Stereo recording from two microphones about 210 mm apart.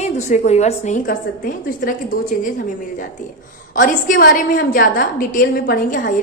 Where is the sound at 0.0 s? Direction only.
35° left (ahead or behind).